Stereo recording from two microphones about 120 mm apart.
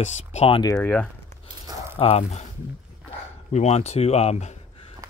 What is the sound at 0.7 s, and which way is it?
Speech, 15° left (ahead or behind).